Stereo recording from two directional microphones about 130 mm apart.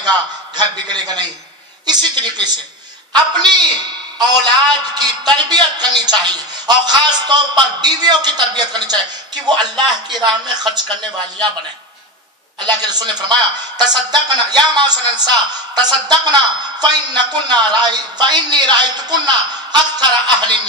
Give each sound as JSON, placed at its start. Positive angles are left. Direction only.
{"t": 0.6, "sound": "a man's voice", "side_deg": -35}
{"t": 12.5, "sound": "a man's voice", "side_deg": -35}